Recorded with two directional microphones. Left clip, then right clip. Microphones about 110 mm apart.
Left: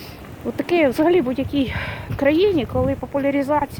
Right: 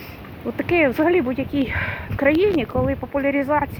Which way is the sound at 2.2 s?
40° left (ahead or behind).